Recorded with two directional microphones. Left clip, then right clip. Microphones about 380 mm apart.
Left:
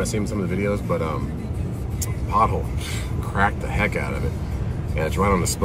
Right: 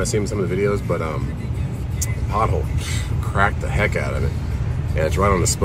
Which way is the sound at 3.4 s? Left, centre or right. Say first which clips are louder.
Right 2 dB; centre.